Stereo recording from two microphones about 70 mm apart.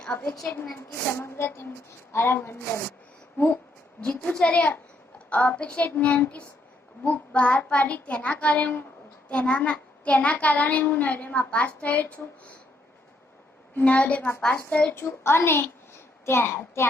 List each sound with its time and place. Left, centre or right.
0.0 s a woman's voice: centre
0.8 s a woman's voice: left
4.2 s a child's voice: centre
13.7 s a child's voice: centre
14.9 s a woman's voice: left